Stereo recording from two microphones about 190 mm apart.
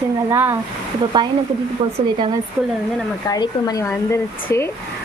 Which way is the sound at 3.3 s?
20° left (ahead or behind).